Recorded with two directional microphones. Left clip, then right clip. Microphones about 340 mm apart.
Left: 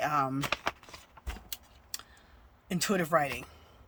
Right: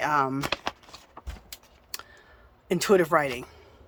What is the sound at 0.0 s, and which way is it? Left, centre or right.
Speech, centre.